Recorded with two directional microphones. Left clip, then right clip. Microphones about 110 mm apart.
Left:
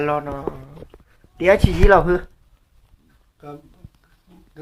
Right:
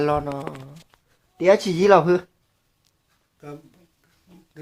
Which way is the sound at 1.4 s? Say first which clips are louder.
Left 1 dB; 20° right (ahead or behind).